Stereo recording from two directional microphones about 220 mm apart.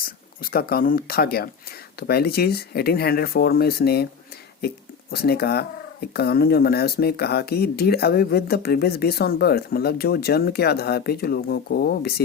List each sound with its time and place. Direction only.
0.0 s speech: 40° left (ahead or behind)
5.1 s speech: 45° left (ahead or behind)